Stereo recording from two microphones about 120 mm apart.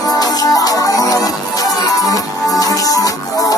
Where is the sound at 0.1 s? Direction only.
30° left (ahead or behind).